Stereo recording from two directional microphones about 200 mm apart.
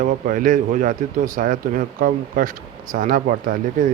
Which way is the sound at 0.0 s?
45° right (ahead or behind).